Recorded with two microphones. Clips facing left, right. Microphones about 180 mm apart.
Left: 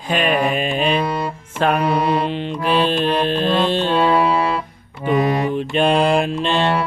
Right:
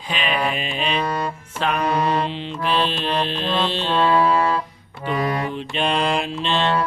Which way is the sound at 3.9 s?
10° left (ahead or behind).